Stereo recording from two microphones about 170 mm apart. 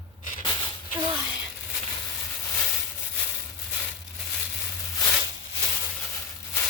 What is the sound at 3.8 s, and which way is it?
Crushing, centre (ahead or behind).